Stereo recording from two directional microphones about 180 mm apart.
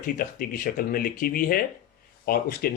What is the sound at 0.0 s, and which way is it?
Speech, 55° left (ahead or behind).